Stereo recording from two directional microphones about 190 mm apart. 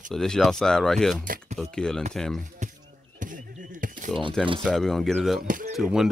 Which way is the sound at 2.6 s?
40° right (ahead or behind).